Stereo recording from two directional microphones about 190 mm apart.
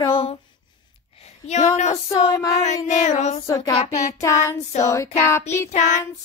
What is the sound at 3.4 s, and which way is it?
Speech, 15° left (ahead or behind).